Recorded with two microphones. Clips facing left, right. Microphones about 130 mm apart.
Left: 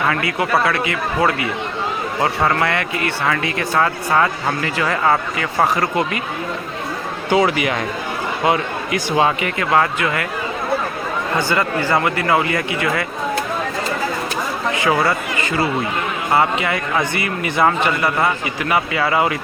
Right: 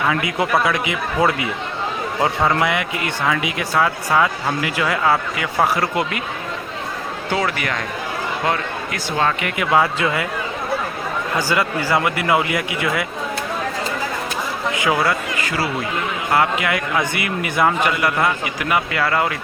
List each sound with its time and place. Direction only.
0.2 s speech: 15° right (ahead or behind)
7.3 s speech: 15° left (ahead or behind)
9.6 s speech: 10° right (ahead or behind)
11.3 s speech: 10° right (ahead or behind)
14.8 s speech: 5° right (ahead or behind)